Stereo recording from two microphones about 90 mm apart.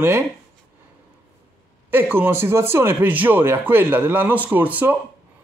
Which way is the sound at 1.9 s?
25° right (ahead or behind).